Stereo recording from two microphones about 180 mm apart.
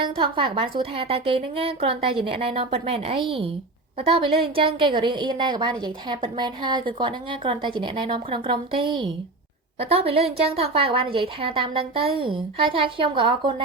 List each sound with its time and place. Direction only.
0.0 s a woman's voice: 30° right (ahead or behind)